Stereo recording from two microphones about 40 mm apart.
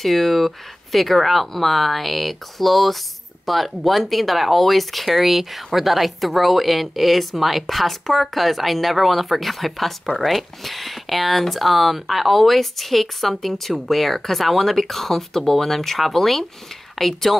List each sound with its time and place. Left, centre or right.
0.0 s speech: centre